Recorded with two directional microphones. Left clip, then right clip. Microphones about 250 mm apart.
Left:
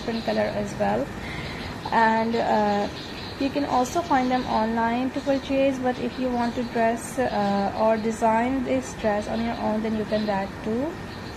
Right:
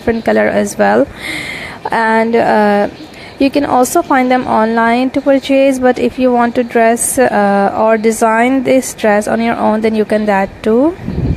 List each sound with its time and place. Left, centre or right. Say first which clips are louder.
0.3 s speech: right 13 dB; right